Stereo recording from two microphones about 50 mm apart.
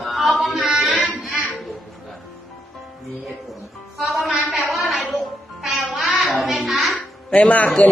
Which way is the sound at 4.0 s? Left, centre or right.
Centre.